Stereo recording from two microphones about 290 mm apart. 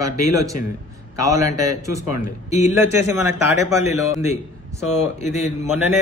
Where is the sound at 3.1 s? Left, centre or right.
Centre.